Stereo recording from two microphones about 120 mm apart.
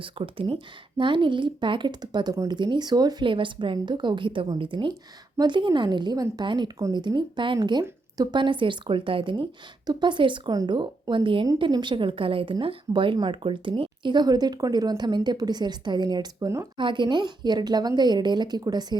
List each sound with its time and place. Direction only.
0.0 s speech: 45° right (ahead or behind)
9.8 s speech: 35° right (ahead or behind)
16.7 s speech: 40° right (ahead or behind)